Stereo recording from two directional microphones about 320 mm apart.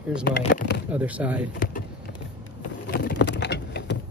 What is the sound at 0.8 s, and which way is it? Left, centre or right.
Speech, centre.